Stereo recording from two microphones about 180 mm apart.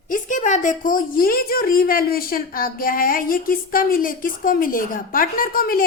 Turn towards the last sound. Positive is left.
turn(degrees=55)  # may be behind; listen again after turning